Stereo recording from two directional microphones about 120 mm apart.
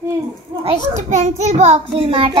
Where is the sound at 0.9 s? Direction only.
75° right (ahead or behind).